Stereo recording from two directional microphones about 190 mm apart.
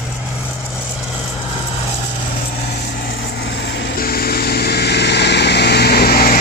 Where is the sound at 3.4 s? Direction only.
60° left (ahead or behind).